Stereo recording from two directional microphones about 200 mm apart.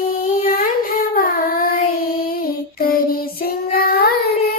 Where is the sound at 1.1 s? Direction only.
45° left (ahead or behind).